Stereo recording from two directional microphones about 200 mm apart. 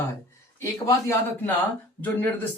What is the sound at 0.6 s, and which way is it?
Speech, 15° left (ahead or behind).